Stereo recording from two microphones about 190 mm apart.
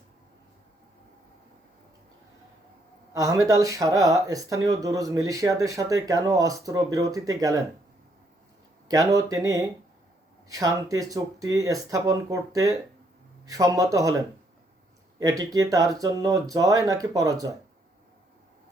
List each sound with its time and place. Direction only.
3.1 s speech: 15° right (ahead or behind)
8.9 s speech: 20° right (ahead or behind)
15.2 s speech: 20° right (ahead or behind)